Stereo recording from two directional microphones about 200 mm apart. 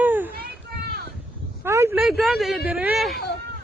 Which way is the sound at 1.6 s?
15° right (ahead or behind).